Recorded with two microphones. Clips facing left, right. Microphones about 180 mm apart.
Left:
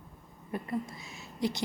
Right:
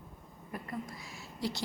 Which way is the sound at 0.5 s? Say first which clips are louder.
Left 6 dB; 25° left (ahead or behind).